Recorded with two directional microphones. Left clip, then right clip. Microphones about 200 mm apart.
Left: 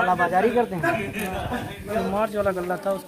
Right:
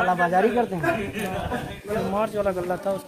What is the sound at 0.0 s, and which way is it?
Speech, 35° right (ahead or behind).